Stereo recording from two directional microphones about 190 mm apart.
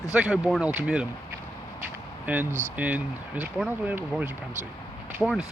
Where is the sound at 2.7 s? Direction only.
10° right (ahead or behind).